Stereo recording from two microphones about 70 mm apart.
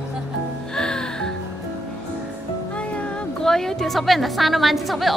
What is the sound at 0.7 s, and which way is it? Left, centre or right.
Music, centre.